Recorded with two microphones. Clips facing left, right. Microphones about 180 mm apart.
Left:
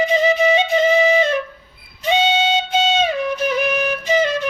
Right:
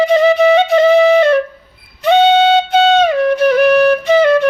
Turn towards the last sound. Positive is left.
turn(degrees=-65)  # may be behind; listen again after turning